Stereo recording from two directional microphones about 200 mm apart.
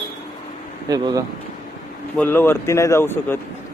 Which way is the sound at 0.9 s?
20° right (ahead or behind).